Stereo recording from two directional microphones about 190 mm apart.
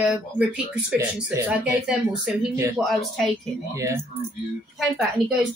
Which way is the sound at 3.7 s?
15° right (ahead or behind).